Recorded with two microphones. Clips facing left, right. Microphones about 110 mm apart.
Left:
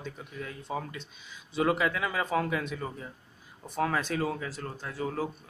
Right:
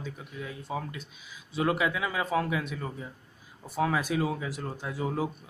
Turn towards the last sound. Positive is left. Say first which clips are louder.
# right 2 dB
turn(degrees=-15)  # may be behind; listen again after turning